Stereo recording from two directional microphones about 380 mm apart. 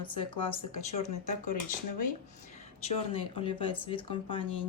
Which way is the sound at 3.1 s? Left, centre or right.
Centre.